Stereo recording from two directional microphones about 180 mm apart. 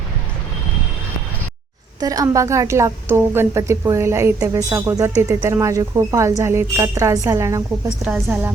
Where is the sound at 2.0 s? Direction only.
20° right (ahead or behind).